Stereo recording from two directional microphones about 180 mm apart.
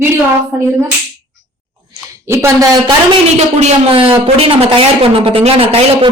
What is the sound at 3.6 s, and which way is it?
A woman's voice, 35° right (ahead or behind).